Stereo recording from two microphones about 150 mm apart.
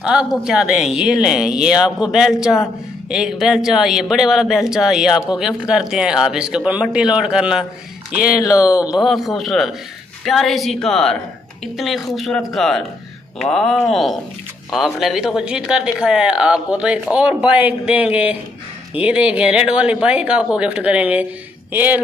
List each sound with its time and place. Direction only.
0.0 s speech: 5° right (ahead or behind)
8.5 s speech: 20° left (ahead or behind)
8.7 s speech: 5° right (ahead or behind)